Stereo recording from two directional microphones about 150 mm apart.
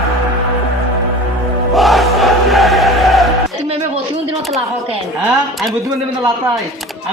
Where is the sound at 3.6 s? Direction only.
45° right (ahead or behind).